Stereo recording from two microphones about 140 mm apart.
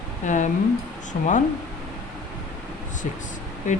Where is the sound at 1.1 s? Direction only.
90° left.